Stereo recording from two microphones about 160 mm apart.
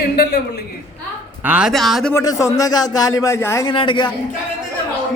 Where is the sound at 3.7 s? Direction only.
30° left (ahead or behind).